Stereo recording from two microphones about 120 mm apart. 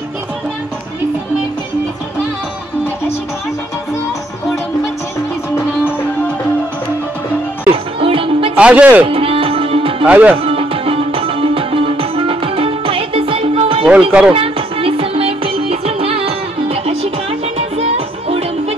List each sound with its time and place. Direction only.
7.7 s music: 50° right (ahead or behind)
8.5 s speech: 10° right (ahead or behind)
9.0 s music: 50° right (ahead or behind)
10.0 s speech: 10° right (ahead or behind)
10.4 s music: 50° right (ahead or behind)
13.8 s speech: 10° right (ahead or behind)
14.3 s music: 50° right (ahead or behind)